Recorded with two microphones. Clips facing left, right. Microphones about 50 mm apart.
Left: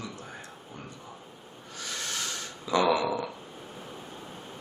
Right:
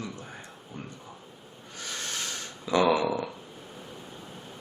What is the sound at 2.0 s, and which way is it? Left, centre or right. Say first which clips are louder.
Rub: left 1 dB; left.